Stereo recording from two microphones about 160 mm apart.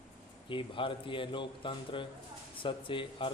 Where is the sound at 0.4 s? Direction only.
30° left (ahead or behind).